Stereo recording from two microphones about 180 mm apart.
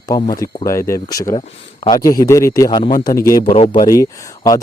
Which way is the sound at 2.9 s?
50° left (ahead or behind).